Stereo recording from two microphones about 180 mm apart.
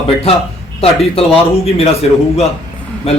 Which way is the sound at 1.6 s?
35° left (ahead or behind).